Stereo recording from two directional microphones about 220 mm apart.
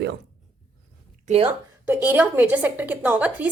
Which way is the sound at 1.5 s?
10° right (ahead or behind).